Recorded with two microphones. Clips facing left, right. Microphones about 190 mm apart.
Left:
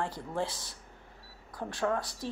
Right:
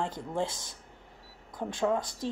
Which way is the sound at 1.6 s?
20° right (ahead or behind).